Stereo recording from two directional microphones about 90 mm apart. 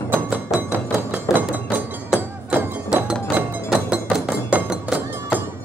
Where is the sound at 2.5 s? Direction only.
15° right (ahead or behind).